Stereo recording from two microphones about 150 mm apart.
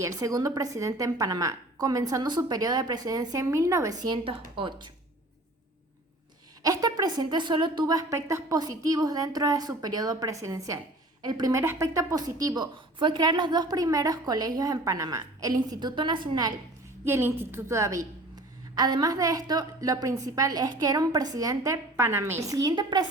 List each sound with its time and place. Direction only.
0.0 s a woman's voice: 25° right (ahead or behind)
6.6 s a woman's voice: 25° right (ahead or behind)
17.1 s a woman's voice: 15° right (ahead or behind)